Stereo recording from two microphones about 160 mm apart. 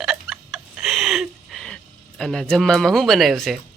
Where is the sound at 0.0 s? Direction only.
5° right (ahead or behind).